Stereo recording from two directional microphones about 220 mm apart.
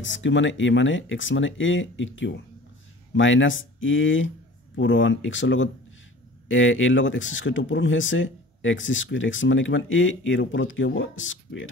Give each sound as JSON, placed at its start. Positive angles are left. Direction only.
{"t": 0.0, "sound": "speech", "side_deg": 55}